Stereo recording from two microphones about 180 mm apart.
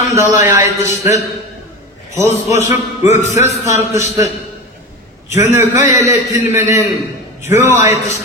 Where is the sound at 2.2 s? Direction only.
35° left (ahead or behind).